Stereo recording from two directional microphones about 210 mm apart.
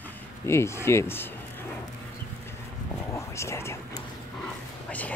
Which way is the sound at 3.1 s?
15° left (ahead or behind).